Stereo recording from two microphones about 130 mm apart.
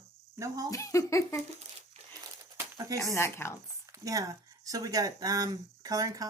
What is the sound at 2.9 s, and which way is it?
Speech, 20° left (ahead or behind).